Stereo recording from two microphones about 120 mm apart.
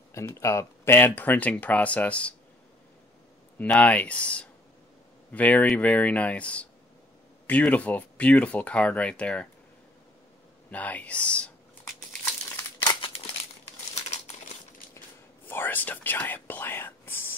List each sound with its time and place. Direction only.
0.1 s speech: 25° left (ahead or behind)
3.5 s speech: 15° left (ahead or behind)
10.7 s speech: 15° left (ahead or behind)
12.8 s crumpling: 45° left (ahead or behind)
13.9 s crumpling: 65° left (ahead or behind)
15.4 s whispering: 15° left (ahead or behind)